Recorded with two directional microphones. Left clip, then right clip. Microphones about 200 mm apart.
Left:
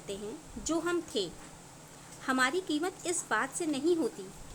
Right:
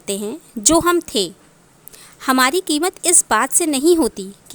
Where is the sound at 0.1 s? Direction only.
55° right (ahead or behind).